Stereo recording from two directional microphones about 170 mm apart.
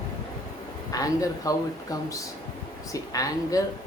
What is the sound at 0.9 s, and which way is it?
Speech, 20° left (ahead or behind).